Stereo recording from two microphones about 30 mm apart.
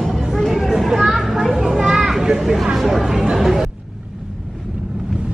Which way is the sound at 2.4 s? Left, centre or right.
Centre.